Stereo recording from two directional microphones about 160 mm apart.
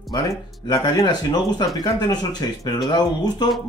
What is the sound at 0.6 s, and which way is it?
Speech, 25° left (ahead or behind).